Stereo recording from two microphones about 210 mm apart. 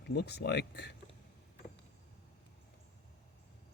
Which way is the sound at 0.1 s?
50° left (ahead or behind).